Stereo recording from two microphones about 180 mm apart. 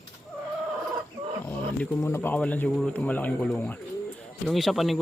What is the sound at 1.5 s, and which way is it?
Speech, 10° left (ahead or behind).